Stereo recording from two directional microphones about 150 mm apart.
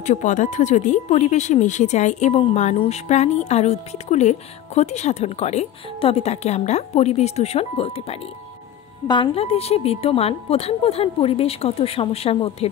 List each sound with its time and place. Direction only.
0.0 s a woman's voice: 55° left (ahead or behind)